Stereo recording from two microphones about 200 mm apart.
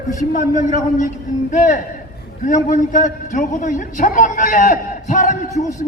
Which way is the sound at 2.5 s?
40° left (ahead or behind).